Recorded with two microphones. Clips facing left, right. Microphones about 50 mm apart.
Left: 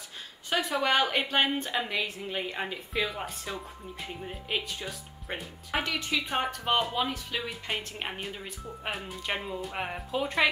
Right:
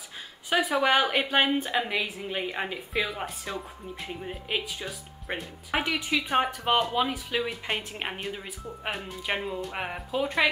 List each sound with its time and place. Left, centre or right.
0.5 s a woman's voice: centre